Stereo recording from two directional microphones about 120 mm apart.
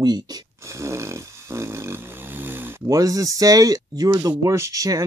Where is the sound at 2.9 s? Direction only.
30° right (ahead or behind).